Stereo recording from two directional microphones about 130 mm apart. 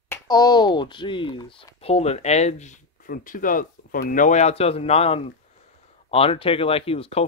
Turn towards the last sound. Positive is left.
turn(degrees=50)  # may be behind; listen again after turning